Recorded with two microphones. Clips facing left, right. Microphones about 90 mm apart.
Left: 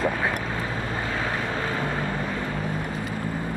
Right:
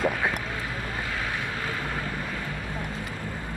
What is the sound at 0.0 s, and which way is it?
Vehicle, 35° left (ahead or behind).